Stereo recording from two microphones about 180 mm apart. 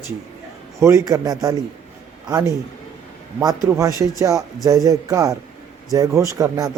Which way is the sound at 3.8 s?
20° right (ahead or behind).